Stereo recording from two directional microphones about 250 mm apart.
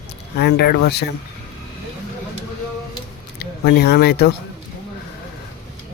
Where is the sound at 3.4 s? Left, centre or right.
Left.